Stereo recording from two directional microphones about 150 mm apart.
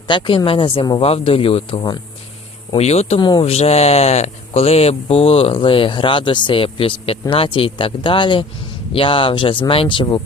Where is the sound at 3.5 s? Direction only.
45° left (ahead or behind).